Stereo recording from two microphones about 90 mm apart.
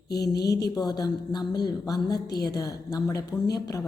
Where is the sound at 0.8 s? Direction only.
45° left (ahead or behind).